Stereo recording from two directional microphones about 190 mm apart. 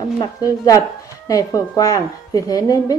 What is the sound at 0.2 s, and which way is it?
A woman's voice, 20° left (ahead or behind).